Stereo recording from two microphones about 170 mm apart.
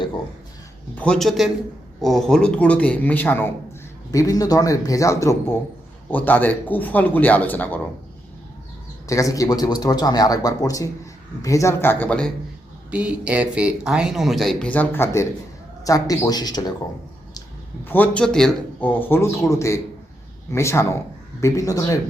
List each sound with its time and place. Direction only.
0.9 s speech: 5° left (ahead or behind)
9.0 s speech: 20° left (ahead or behind)
12.9 s speech: 10° right (ahead or behind); by 16.7 s 25° left (ahead or behind)
17.8 s speech: 10° left (ahead or behind)